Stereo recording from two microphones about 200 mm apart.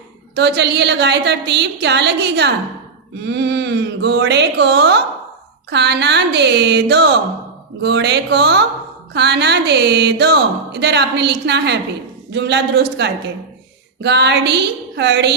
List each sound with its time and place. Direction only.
0.3 s speech: 60° right (ahead or behind)